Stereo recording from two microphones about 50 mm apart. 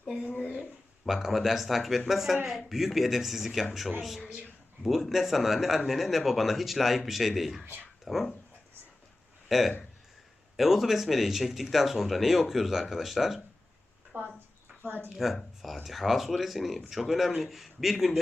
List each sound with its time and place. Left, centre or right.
0.3 s a sound: left
1.0 s speech: centre
7.6 s speech: right
8.0 s speech: centre
9.5 s speech: centre
14.1 s speech: right
15.2 s speech: centre